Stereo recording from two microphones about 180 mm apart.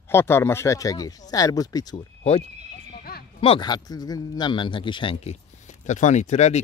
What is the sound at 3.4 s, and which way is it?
Speech, 30° left (ahead or behind).